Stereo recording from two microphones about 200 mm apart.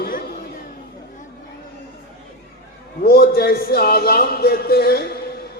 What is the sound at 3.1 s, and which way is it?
A man's voice, 50° left (ahead or behind).